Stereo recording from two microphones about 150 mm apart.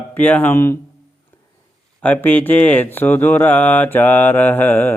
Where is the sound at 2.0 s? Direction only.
10° left (ahead or behind).